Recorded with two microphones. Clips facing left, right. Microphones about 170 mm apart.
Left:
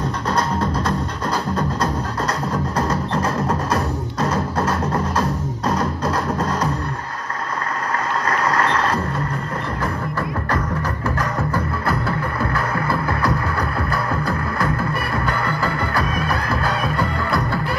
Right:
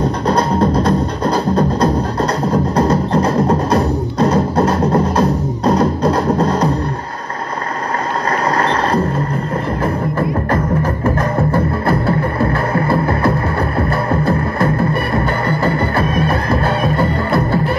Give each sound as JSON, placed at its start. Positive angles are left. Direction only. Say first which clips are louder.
{"t": 0.3, "sound": "music", "louder": "right 7 dB", "side_deg": -20}
{"t": 2.5, "sound": "music", "louder": "right 9 dB", "side_deg": -35}
{"t": 8.3, "sound": "vehicle", "louder": "right 4 dB", "side_deg": -35}
{"t": 11.1, "sound": "music", "louder": "right 6 dB", "side_deg": -25}
{"t": 14.1, "sound": "music", "louder": "right 7 dB", "side_deg": -30}